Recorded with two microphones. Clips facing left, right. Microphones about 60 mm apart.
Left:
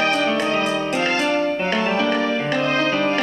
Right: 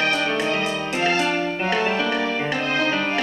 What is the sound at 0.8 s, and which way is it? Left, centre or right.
Music, centre.